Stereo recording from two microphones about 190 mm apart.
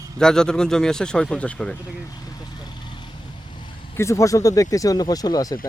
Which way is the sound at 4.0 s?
15° left (ahead or behind).